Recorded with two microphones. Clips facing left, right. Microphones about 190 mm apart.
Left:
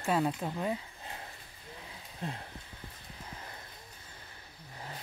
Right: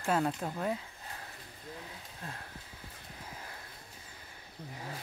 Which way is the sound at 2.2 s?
20° left (ahead or behind).